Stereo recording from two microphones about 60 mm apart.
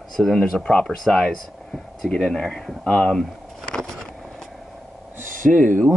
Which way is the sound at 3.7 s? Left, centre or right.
Centre.